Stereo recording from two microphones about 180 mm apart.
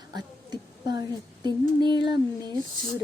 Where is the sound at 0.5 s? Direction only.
20° right (ahead or behind).